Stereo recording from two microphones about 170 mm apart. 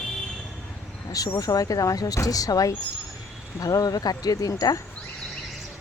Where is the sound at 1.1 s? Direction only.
20° left (ahead or behind).